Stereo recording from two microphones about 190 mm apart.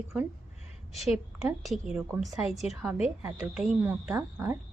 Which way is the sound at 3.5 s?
5° right (ahead or behind).